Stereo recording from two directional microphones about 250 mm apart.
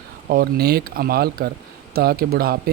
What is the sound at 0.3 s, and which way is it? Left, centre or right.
Speech, right.